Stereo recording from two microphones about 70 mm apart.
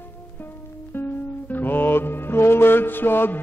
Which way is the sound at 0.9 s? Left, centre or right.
Left.